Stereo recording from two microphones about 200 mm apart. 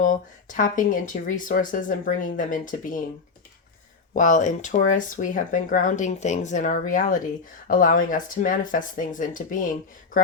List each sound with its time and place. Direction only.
0.0 s speech: 40° left (ahead or behind)
4.1 s speech: 40° left (ahead or behind)